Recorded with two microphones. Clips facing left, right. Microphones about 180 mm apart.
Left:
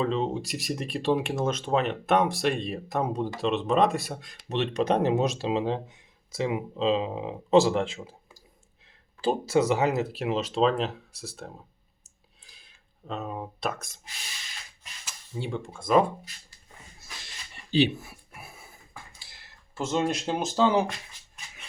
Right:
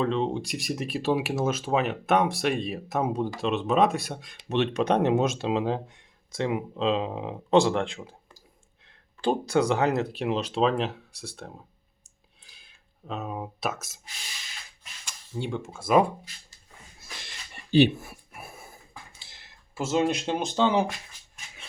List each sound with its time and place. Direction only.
0.0 s speech: centre (ahead or behind)
12.4 s a sound: centre (ahead or behind)
15.0 s speech: centre (ahead or behind)
17.7 s speech: 50° right (ahead or behind)
18.3 s a sound: 50° right (ahead or behind)
19.7 s speech: 5° right (ahead or behind)